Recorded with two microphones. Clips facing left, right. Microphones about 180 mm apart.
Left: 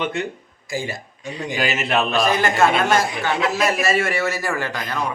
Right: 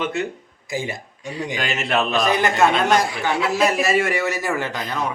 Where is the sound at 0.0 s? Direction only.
5° right (ahead or behind).